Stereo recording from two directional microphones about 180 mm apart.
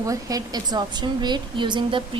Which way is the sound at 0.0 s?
20° right (ahead or behind).